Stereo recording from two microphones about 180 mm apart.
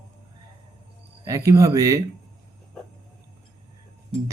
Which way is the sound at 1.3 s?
15° right (ahead or behind).